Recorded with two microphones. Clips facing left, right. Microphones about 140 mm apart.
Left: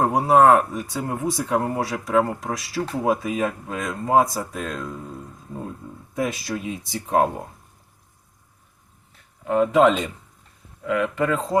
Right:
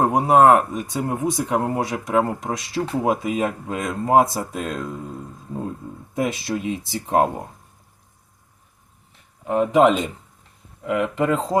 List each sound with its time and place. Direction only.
0.0 s speech: 20° right (ahead or behind)
5.5 s a sound: 20° right (ahead or behind)
6.1 s speech: 25° right (ahead or behind)
9.5 s speech: 15° right (ahead or behind)